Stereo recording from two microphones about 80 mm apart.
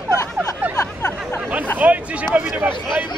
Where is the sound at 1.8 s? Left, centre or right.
Centre.